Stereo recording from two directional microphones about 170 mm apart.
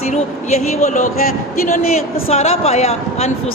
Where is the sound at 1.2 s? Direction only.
60° left (ahead or behind).